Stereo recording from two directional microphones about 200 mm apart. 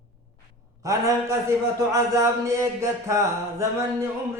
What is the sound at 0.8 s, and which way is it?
Mantra, 15° right (ahead or behind).